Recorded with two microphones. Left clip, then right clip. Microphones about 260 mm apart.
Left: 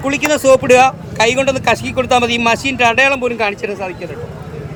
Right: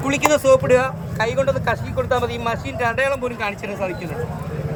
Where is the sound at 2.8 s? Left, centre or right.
Left.